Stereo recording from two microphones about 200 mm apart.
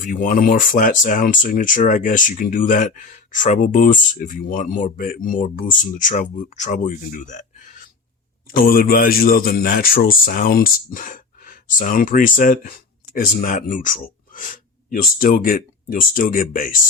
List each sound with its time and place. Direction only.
0.0 s speech: 45° left (ahead or behind)